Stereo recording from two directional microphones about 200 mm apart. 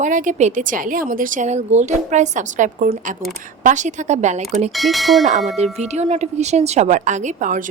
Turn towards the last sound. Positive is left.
turn(degrees=-40)  # may be behind; listen again after turning